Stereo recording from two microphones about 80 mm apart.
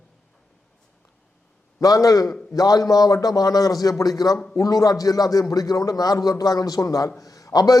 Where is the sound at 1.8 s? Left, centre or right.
Left.